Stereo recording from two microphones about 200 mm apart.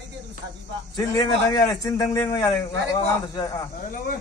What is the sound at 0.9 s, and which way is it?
A man's voice, 20° left (ahead or behind).